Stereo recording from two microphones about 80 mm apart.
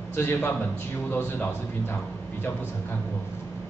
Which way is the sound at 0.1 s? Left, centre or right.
Left.